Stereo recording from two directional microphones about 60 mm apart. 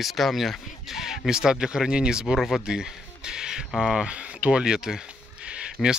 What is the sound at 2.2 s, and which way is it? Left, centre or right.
Speech, centre.